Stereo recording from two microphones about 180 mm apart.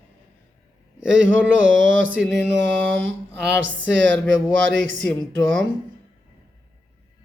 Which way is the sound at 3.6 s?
90° right.